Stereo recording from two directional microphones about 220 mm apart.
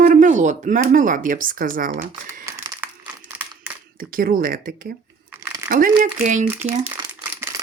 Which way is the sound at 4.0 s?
40° right (ahead or behind).